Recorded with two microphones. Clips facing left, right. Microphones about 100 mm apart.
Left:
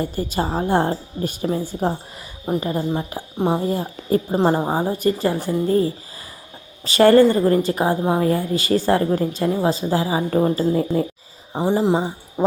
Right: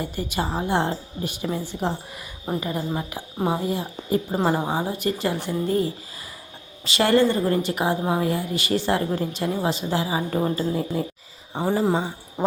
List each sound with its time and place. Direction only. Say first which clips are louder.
0.0 s a woman's voice: left 4 dB; 35° left (ahead or behind)
2.6 s a woman's voice: left 4 dB; 30° left (ahead or behind)
3.7 s speech: left 4 dB; 45° left (ahead or behind)
4.3 s a woman's voice: left 5 dB; 25° left (ahead or behind)
6.8 s a woman's voice: left 7 dB; 40° left (ahead or behind)
11.6 s speech: left 3 dB; 25° left (ahead or behind)
12.4 s owl: left 4 dB; 10° left (ahead or behind)